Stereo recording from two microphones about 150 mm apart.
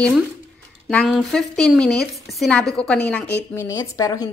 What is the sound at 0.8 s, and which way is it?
A woman's voice, centre (ahead or behind).